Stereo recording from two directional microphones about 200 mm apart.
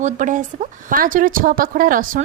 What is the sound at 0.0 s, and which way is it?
A woman's voice, 40° right (ahead or behind).